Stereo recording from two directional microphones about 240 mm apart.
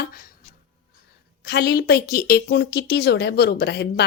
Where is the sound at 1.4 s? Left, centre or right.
Left.